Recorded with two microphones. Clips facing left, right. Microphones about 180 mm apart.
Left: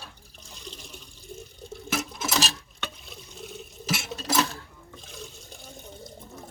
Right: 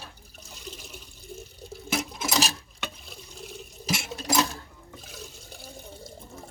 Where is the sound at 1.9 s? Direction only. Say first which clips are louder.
Right 1 dB; 15° right (ahead or behind).